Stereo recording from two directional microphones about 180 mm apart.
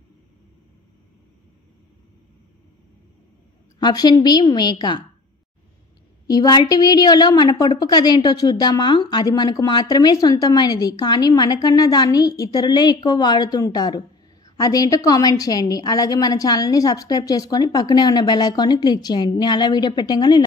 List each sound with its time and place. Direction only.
3.8 s a woman's voice: 20° left (ahead or behind)
6.2 s a woman's voice: 20° left (ahead or behind)